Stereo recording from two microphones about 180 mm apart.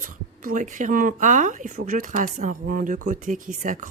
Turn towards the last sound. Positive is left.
turn(degrees=-45)  # may be behind; listen again after turning